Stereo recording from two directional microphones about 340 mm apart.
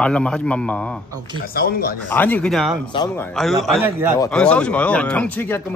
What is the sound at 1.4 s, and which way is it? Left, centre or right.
Speech, left.